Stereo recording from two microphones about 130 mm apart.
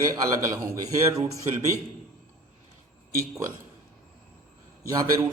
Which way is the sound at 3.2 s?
25° right (ahead or behind).